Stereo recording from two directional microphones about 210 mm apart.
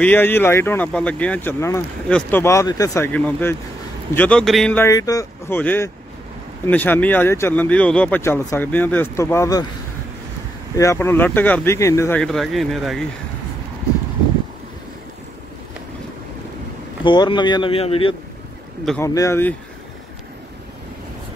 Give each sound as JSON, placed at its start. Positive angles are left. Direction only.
{"t": 0.0, "sound": "speech", "side_deg": 10}
{"t": 10.8, "sound": "speech", "side_deg": 15}
{"t": 17.0, "sound": "speech", "side_deg": 20}
{"t": 19.0, "sound": "speech", "side_deg": 15}